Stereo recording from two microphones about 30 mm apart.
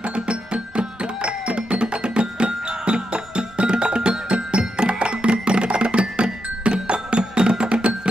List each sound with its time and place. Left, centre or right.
0.1 s music: right